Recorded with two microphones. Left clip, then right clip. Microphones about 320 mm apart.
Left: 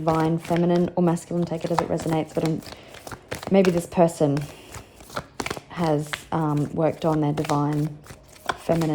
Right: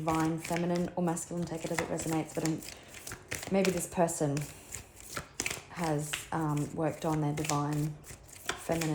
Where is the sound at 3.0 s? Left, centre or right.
Centre.